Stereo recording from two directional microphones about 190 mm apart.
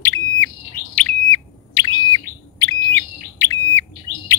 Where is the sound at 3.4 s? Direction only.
15° left (ahead or behind).